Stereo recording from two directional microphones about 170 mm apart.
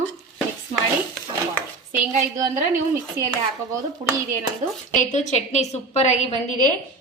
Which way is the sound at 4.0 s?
35° right (ahead or behind).